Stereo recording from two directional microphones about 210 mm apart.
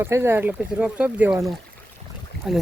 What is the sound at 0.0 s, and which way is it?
Speech, 10° right (ahead or behind).